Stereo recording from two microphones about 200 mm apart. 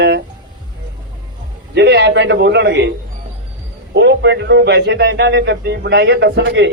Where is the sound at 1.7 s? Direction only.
60° right (ahead or behind).